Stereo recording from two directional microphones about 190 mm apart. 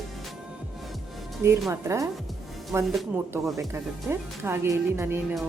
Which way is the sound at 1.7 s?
15° right (ahead or behind).